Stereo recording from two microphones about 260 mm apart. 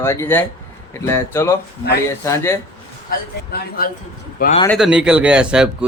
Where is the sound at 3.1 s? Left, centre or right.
Left.